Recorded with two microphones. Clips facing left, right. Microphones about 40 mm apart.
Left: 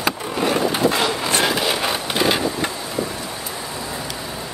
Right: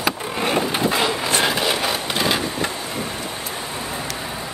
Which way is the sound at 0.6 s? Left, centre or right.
Centre.